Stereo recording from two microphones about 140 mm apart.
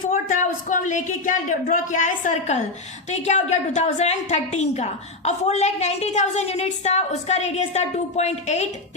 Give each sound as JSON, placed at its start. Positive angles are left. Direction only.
{"t": 0.1, "sound": "a woman's voice", "side_deg": 70}